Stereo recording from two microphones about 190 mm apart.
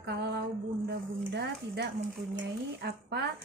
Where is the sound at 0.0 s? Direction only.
60° right (ahead or behind).